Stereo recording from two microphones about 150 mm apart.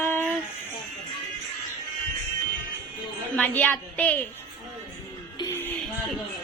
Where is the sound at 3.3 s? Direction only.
10° left (ahead or behind).